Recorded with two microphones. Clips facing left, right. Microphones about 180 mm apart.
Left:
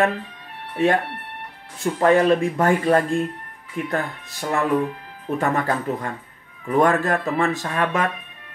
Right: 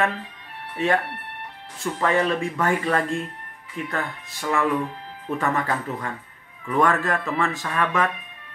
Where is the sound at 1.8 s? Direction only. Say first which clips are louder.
Left 6 dB; 45° left (ahead or behind).